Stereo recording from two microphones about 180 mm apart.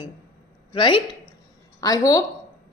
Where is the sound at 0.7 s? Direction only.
30° left (ahead or behind).